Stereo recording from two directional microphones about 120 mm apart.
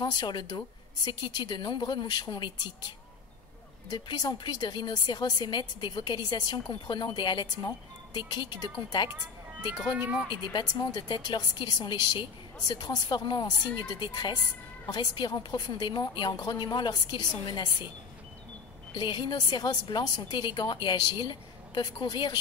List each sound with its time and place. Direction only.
0.0 s a woman's voice: 35° left (ahead or behind)
3.9 s a woman's voice: 35° left (ahead or behind)
10.3 s a woman's voice: 35° left (ahead or behind)
18.9 s a woman's voice: 40° left (ahead or behind)